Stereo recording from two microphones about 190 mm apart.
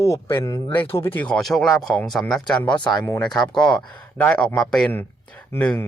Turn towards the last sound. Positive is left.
turn(degrees=5)  # may be behind; listen again after turning